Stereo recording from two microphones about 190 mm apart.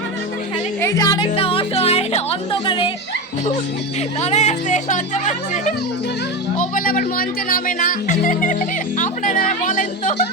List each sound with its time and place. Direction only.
0.8 s speech: 15° left (ahead or behind)
4.2 s speech: 35° left (ahead or behind)